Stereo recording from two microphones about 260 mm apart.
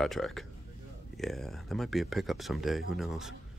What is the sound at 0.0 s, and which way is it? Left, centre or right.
Speech, centre.